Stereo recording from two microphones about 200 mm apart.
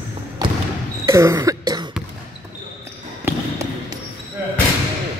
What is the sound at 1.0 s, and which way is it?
Cough, 15° right (ahead or behind).